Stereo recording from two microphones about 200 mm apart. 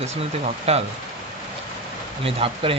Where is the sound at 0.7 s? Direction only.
30° right (ahead or behind).